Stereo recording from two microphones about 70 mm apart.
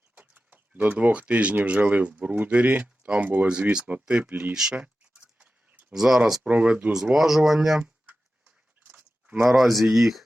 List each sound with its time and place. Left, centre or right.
0.2 s speech: right
4.5 s a sound: centre
6.4 s speech: centre
6.9 s speech: centre
7.8 s a sound: centre
9.5 s speech: centre